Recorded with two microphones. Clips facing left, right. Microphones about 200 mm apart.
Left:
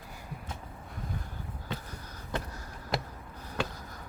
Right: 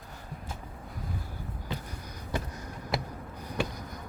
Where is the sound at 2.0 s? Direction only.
15° right (ahead or behind).